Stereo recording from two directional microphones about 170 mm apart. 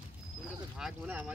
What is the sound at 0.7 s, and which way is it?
Speech, 5° right (ahead or behind).